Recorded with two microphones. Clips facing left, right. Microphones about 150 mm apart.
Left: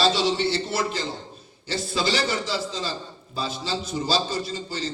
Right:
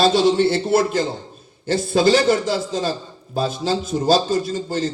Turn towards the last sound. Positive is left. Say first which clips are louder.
# right 8 dB
turn(degrees=-50)  # may be behind; listen again after turning